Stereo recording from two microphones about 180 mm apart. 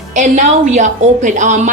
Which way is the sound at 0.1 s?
45° right (ahead or behind).